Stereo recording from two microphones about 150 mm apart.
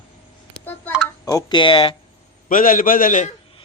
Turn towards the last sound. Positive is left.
turn(degrees=55)  # may be behind; listen again after turning